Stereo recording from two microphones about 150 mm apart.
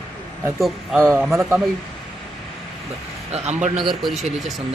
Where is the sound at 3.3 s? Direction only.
50° right (ahead or behind).